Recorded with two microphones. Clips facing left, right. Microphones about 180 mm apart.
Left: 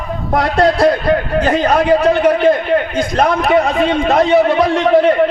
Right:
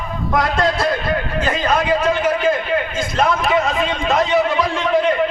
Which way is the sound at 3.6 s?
60° left (ahead or behind).